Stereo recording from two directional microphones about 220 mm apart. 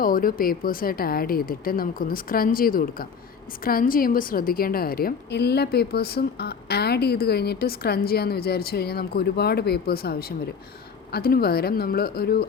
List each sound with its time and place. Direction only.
0.0 s a woman's voice: 40° left (ahead or behind)